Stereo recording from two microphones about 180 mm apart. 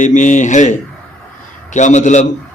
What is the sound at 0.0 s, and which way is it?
A man's voice, 45° left (ahead or behind).